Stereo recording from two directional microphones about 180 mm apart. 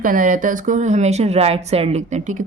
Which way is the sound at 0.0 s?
50° right (ahead or behind).